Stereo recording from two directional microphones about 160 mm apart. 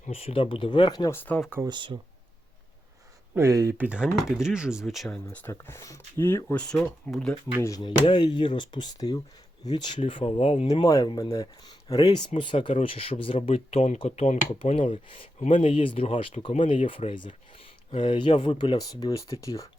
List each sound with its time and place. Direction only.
0.1 s speech: 40° left (ahead or behind)
1.1 s speech: 10° left (ahead or behind)
1.5 s speech: 15° right (ahead or behind)
1.7 s speech: 30° right (ahead or behind)
3.3 s speech: 20° right (ahead or behind); by 7.3 s 5° left (ahead or behind)
7.6 s speech: 25° left (ahead or behind)
10.7 s speech: 25° left (ahead or behind)